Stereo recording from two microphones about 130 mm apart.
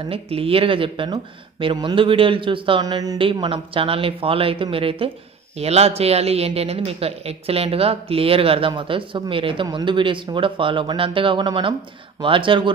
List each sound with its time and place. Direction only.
0.1 s speech: 45° right (ahead or behind)
2.8 s speech: 30° right (ahead or behind)
3.2 s speech: 45° right (ahead or behind)